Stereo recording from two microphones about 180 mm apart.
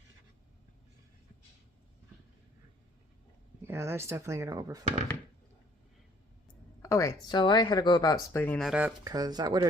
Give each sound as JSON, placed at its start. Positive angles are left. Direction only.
{"t": 3.7, "sound": "speech", "side_deg": -15}
{"t": 6.8, "sound": "speech", "side_deg": 15}
{"t": 8.6, "sound": "speech", "side_deg": -5}
{"t": 9.0, "sound": "speech", "side_deg": -20}